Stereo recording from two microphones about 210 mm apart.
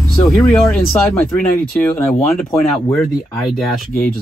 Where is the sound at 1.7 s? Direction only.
10° left (ahead or behind).